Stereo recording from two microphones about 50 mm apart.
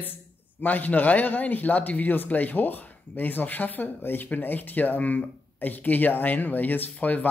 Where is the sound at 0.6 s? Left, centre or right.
Left.